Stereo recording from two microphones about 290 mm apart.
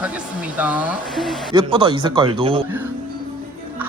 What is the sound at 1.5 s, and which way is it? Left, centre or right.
Speech, centre.